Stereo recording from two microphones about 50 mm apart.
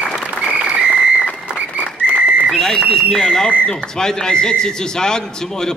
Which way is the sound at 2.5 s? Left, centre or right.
Centre.